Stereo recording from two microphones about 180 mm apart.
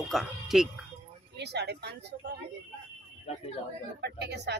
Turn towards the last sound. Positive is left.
turn(degrees=-70)  # may be behind; listen again after turning